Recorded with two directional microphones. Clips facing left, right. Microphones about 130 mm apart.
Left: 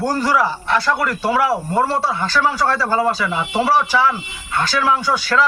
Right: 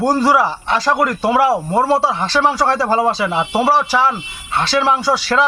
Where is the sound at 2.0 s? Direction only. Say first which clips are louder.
Right 2 dB; 90° right.